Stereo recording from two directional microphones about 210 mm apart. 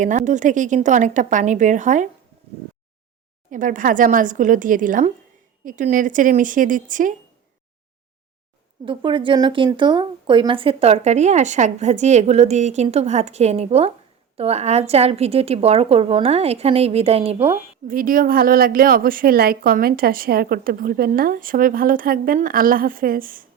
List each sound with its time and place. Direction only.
0.0 s a woman's voice: 35° right (ahead or behind)
3.5 s a woman's voice: 40° right (ahead or behind)
8.8 s a woman's voice: 25° right (ahead or behind)
17.8 s a woman's voice: 40° right (ahead or behind)